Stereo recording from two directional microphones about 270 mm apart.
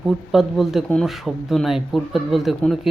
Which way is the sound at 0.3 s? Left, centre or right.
Centre.